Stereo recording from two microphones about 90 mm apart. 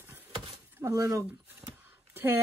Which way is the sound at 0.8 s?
40° right (ahead or behind).